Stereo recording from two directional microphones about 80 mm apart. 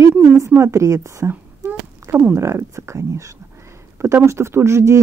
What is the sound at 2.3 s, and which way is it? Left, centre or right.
A woman's voice, right.